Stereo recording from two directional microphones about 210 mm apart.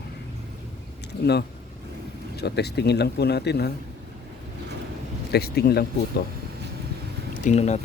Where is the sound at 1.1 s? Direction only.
50° left (ahead or behind).